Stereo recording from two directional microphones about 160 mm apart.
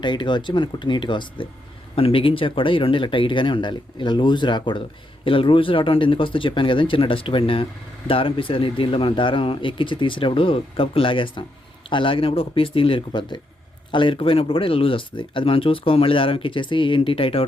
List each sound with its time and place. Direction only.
0.0 s speech: 30° left (ahead or behind)